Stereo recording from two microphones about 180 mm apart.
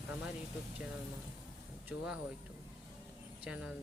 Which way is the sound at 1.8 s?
5° right (ahead or behind).